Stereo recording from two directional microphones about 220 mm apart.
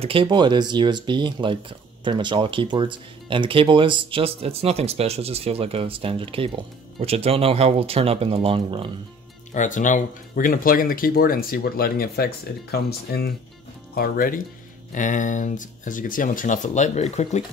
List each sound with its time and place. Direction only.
0.0 s speech: 25° right (ahead or behind)
9.5 s speech: 35° left (ahead or behind)